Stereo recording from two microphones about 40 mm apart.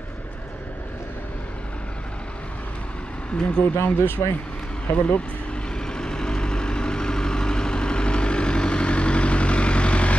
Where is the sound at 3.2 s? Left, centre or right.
Left.